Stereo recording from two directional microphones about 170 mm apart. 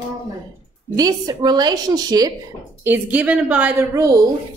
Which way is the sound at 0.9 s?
20° right (ahead or behind).